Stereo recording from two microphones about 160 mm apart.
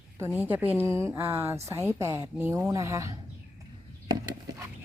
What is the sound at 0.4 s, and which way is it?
A woman's voice, 10° right (ahead or behind).